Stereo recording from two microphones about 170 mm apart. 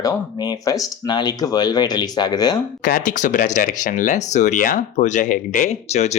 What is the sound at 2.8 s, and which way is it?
Speech, 55° left (ahead or behind).